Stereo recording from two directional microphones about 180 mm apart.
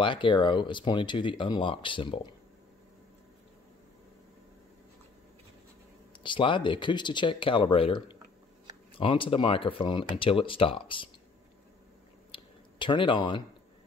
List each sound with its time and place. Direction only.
0.0 s speech: 25° left (ahead or behind)
6.2 s speech: 25° left (ahead or behind)
12.3 s a sound: 25° left (ahead or behind)